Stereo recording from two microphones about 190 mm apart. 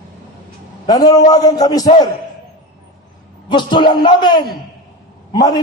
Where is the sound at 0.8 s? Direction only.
20° left (ahead or behind).